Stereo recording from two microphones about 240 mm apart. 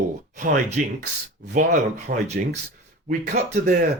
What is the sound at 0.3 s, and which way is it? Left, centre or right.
Speech, right.